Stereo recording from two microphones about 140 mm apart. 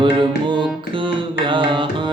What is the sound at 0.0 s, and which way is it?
Music, 35° right (ahead or behind).